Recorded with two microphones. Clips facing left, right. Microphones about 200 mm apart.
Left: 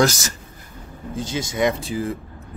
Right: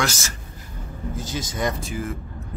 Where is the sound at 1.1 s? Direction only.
25° left (ahead or behind).